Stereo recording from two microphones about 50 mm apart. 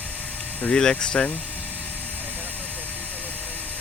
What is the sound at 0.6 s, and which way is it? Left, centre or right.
Speech, centre.